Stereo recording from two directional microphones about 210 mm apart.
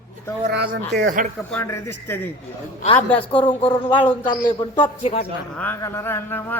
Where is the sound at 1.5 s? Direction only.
10° left (ahead or behind).